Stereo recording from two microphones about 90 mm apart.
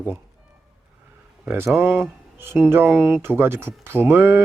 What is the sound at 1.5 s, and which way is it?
Speech, 25° right (ahead or behind).